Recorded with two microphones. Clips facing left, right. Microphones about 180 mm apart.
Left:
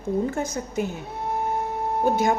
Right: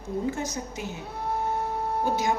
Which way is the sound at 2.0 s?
55° left (ahead or behind).